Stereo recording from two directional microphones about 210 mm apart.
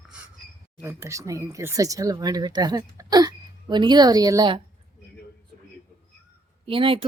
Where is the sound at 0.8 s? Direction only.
15° right (ahead or behind).